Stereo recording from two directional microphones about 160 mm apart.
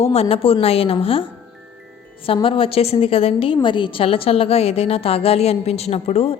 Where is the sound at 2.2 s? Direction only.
35° left (ahead or behind).